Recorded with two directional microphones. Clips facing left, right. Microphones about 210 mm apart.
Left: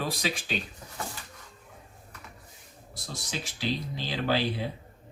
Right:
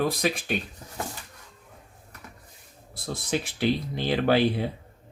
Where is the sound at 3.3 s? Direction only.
60° right (ahead or behind).